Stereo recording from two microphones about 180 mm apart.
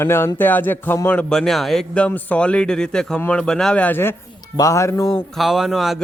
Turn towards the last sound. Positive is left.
turn(degrees=0)  # may be behind; listen again after turning